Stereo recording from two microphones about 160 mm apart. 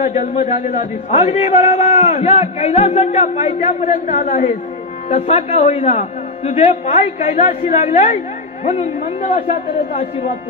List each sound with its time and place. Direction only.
0.0 s a man's voice: 45° left (ahead or behind)